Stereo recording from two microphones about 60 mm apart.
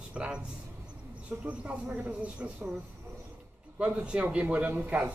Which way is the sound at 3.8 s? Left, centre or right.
Centre.